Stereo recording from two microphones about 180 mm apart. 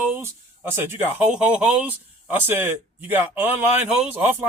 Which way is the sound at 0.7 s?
15° right (ahead or behind).